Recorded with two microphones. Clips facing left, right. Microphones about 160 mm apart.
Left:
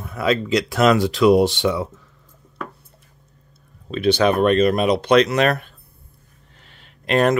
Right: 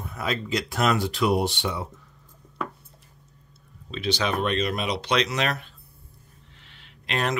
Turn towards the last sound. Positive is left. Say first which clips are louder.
# left 10 dB
turn(degrees=45)  # may be behind; listen again after turning